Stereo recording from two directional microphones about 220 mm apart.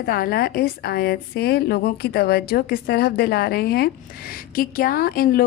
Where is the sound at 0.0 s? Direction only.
45° left (ahead or behind).